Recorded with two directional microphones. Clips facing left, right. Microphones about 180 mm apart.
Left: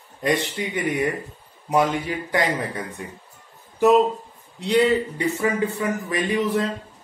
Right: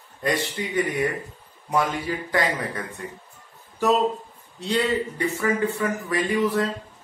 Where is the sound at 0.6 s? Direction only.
20° left (ahead or behind).